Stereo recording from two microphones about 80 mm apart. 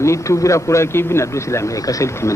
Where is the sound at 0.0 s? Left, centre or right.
Left.